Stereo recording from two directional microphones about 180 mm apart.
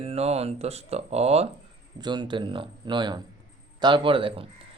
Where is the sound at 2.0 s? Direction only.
25° right (ahead or behind).